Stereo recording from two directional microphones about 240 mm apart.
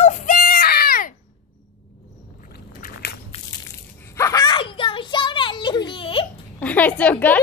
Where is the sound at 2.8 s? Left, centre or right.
Left.